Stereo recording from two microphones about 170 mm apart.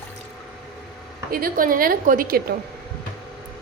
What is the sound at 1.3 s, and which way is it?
A woman's voice, 55° right (ahead or behind).